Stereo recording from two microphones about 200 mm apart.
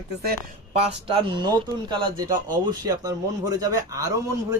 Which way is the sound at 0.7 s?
30° right (ahead or behind).